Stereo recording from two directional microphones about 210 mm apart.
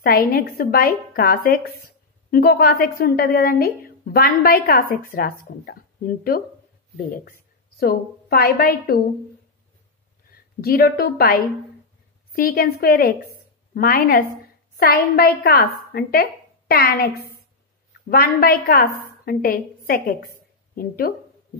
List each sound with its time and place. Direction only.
0.0 s a woman's voice: 45° left (ahead or behind)
10.6 s a woman's voice: 45° left (ahead or behind)
18.1 s speech: 45° left (ahead or behind)